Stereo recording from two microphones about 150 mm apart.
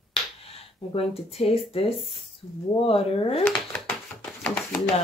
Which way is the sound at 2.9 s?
40° left (ahead or behind).